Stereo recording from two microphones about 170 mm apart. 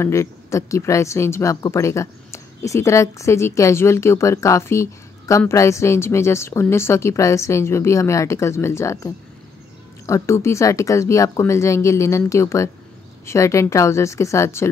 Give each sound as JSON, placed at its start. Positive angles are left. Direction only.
{"t": 0.0, "sound": "speech", "side_deg": 15}